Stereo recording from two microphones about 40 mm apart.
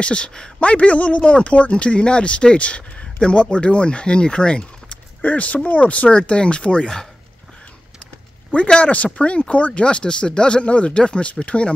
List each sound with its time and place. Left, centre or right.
0.0 s speech: left
0.6 s speech: left
5.2 s speech: left
8.8 s speech: left